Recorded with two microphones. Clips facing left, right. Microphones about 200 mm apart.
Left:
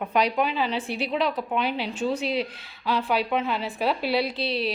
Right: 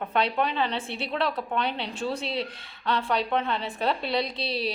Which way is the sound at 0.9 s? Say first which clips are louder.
Left 5 dB; 30° right (ahead or behind).